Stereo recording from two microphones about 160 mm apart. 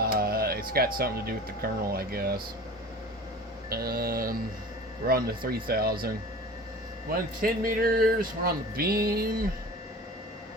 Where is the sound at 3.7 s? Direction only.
70° right (ahead or behind).